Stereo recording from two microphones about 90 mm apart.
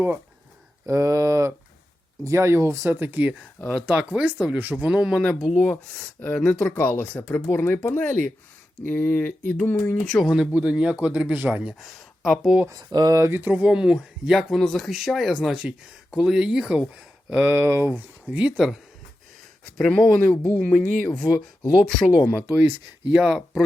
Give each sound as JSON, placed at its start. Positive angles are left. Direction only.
{"t": 0.9, "sound": "speech", "side_deg": -35}
{"t": 3.7, "sound": "speech", "side_deg": -10}
{"t": 10.5, "sound": "speech", "side_deg": -15}
{"t": 11.7, "sound": "speech", "side_deg": 0}
{"t": 12.7, "sound": "speech", "side_deg": -50}
{"t": 13.4, "sound": "speech", "side_deg": -20}
{"t": 17.4, "sound": "speech", "side_deg": -25}
{"t": 18.5, "sound": "speech", "side_deg": -5}
{"t": 23.1, "sound": "speech", "side_deg": -10}